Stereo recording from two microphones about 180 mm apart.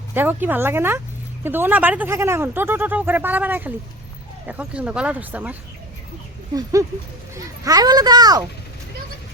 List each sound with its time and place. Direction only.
0.1 s speech: 10° right (ahead or behind)
6.5 s a child's voice: 20° right (ahead or behind)